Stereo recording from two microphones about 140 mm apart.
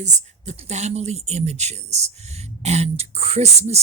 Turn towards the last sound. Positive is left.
turn(degrees=-50)  # may be behind; listen again after turning